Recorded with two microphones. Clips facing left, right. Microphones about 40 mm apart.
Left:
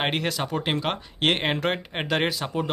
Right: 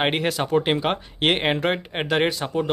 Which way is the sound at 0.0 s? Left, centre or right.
Centre.